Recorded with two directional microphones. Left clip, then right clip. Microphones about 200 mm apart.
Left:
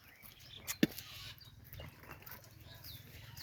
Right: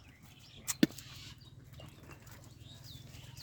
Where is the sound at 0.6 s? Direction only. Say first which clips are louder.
Right 3 dB; 25° right (ahead or behind).